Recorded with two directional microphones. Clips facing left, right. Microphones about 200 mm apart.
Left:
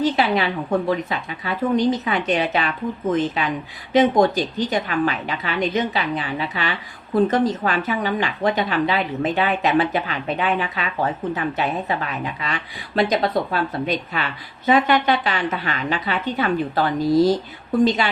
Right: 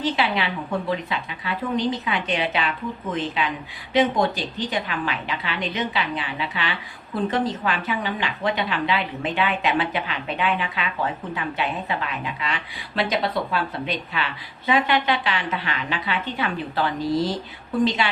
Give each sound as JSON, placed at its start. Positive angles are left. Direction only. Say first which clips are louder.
{"t": 0.0, "sound": "a sound", "louder": "left 4 dB", "side_deg": 40}
{"t": 0.9, "sound": "a woman's voice", "louder": "left 4 dB", "side_deg": 45}
{"t": 3.9, "sound": "a woman's voice", "louder": "left 5 dB", "side_deg": 45}